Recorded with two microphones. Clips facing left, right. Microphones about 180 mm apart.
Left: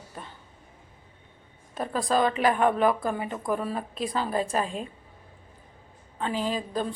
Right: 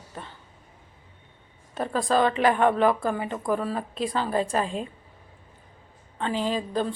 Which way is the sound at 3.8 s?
35° right (ahead or behind).